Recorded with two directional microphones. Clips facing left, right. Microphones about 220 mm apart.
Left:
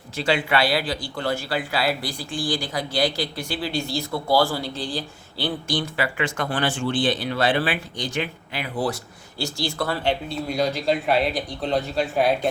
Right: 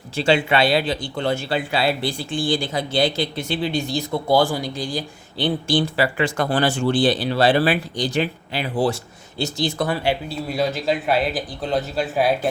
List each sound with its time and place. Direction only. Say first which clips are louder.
0.2 s a man's voice: right 4 dB; 25° right (ahead or behind); by 12.5 s centre (ahead or behind)